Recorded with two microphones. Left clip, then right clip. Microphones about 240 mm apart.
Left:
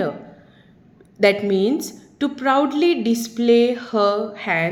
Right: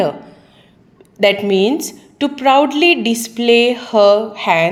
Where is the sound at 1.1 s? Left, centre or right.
Centre.